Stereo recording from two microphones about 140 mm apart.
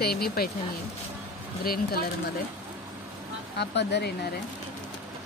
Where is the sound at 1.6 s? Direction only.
90° left.